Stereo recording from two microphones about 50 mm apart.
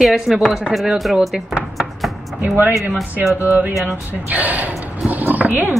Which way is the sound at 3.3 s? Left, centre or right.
Right.